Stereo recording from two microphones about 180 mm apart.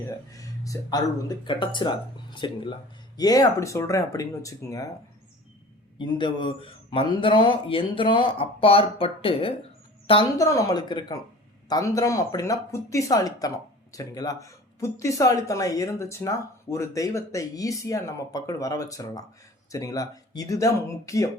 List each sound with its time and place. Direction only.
0.3 s speech: 20° left (ahead or behind)
6.0 s speech: 25° left (ahead or behind)
10.3 s speech: 15° left (ahead or behind)